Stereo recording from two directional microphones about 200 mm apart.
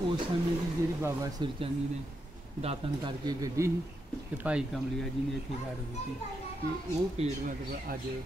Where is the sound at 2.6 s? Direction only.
25° right (ahead or behind); by 4.6 s 10° right (ahead or behind).